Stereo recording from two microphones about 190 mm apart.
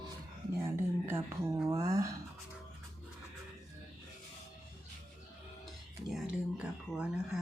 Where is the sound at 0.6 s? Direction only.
10° right (ahead or behind).